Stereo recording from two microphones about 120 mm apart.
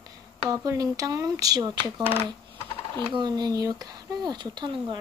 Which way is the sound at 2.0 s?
55° right (ahead or behind).